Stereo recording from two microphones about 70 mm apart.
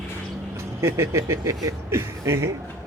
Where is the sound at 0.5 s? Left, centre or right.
Right.